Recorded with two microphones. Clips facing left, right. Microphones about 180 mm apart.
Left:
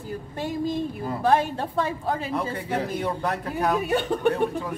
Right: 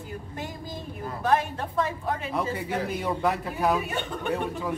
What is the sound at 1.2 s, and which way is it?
Speech, 30° left (ahead or behind).